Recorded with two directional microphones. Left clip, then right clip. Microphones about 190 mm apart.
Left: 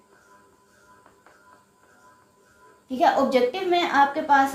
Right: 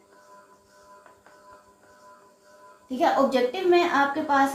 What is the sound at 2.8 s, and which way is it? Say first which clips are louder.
A woman's voice: left 2 dB; 40° left (ahead or behind).